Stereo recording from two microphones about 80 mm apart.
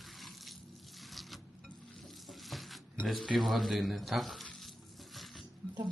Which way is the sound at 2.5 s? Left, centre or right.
Centre.